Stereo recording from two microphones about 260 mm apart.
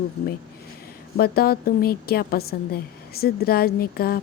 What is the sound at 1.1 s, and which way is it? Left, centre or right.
Speech, left.